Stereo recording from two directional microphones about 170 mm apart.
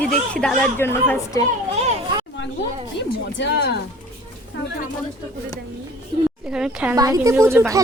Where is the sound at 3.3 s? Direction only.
85° left.